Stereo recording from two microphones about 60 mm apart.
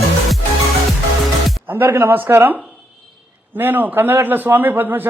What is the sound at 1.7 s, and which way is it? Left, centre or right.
A man's voice, right.